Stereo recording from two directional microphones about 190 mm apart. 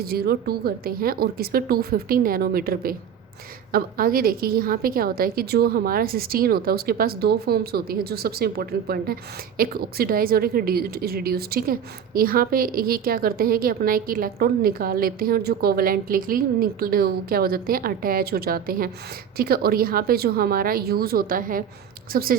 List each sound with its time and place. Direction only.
0.0 s speech: 55° right (ahead or behind)